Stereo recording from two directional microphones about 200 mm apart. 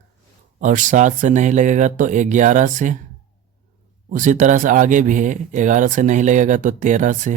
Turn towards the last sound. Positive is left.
turn(degrees=-40)  # may be behind; listen again after turning